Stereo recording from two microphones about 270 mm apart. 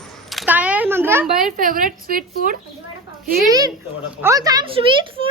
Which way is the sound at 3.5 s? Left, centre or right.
Centre.